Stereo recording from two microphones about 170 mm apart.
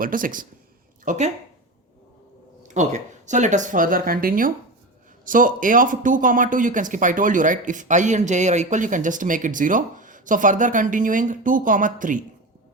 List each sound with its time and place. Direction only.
0.0 s speech: 55° right (ahead or behind)
1.0 s speech: 45° right (ahead or behind)
2.6 s speech: 45° right (ahead or behind)